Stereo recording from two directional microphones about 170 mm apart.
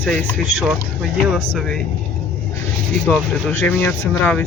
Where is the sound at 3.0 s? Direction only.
10° left (ahead or behind).